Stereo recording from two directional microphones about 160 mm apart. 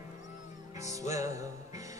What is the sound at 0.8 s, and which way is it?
Music, 20° right (ahead or behind).